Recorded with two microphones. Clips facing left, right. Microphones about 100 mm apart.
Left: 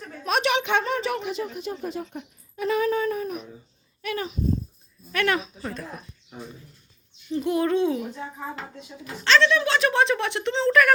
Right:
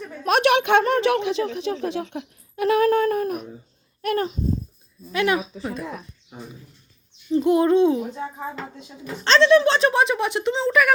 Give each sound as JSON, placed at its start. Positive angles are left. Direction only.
{"t": 0.3, "sound": "a woman's voice", "side_deg": -60}
{"t": 5.1, "sound": "speech", "side_deg": -15}
{"t": 7.3, "sound": "owl", "side_deg": -25}
{"t": 9.2, "sound": "speech", "side_deg": -30}
{"t": 9.9, "sound": "speech", "side_deg": -15}